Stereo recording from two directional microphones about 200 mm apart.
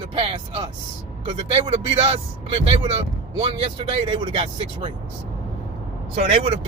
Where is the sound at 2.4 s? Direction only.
30° right (ahead or behind).